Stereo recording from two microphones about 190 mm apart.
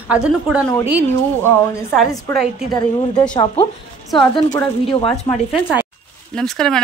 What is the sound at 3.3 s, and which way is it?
Speech, 25° left (ahead or behind).